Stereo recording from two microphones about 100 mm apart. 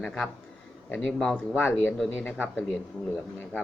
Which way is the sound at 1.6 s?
20° left (ahead or behind).